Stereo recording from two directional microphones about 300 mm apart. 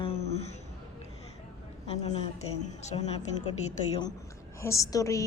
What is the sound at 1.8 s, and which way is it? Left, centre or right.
A woman's voice, centre.